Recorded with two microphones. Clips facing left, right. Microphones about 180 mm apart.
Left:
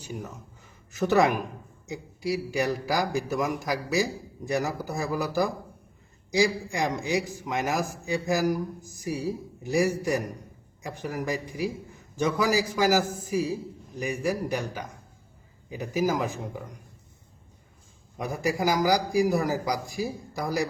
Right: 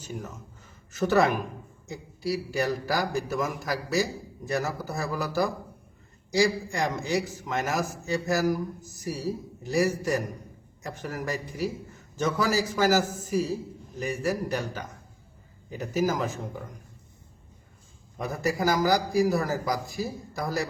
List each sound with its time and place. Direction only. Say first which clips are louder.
0.9 s a man's voice: left 1 dB; 15° left (ahead or behind)
18.2 s a man's voice: even; 15° left (ahead or behind)